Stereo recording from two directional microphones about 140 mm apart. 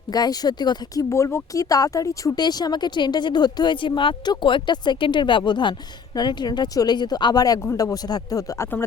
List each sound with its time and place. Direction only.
0.1 s speech: 30° left (ahead or behind)